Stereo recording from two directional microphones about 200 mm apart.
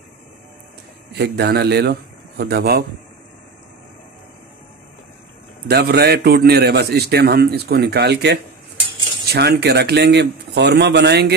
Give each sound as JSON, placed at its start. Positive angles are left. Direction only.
{"t": 1.1, "sound": "a man's voice", "side_deg": -55}
{"t": 5.7, "sound": "a man's voice", "side_deg": -55}